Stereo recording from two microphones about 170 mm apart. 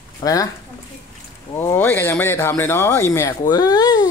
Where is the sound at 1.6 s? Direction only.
10° left (ahead or behind).